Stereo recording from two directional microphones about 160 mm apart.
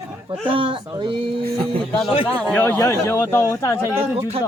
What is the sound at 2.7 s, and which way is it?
Speech, 20° left (ahead or behind).